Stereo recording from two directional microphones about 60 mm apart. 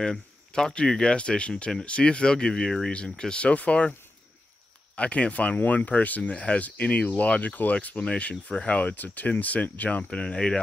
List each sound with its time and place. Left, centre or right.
0.0 s speech: centre
4.9 s speech: left